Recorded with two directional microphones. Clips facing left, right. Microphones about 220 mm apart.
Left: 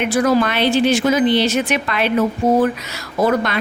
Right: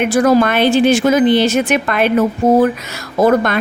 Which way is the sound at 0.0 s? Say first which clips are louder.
Right 4 dB; 50° right (ahead or behind).